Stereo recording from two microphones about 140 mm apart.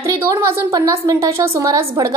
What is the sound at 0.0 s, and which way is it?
A woman's voice, 20° right (ahead or behind).